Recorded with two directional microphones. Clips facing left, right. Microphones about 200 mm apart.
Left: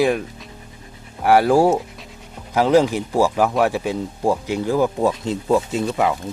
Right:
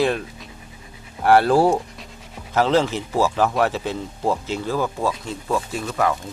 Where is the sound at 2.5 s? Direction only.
15° left (ahead or behind).